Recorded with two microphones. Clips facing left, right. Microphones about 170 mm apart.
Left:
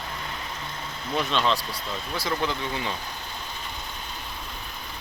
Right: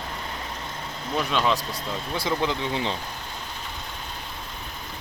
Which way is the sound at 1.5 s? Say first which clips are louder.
Right 2 dB; 45° right (ahead or behind).